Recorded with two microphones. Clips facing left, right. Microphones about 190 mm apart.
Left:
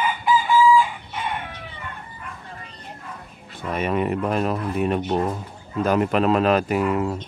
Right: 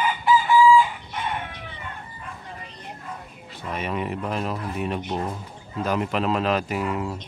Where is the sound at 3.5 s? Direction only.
50° left (ahead or behind).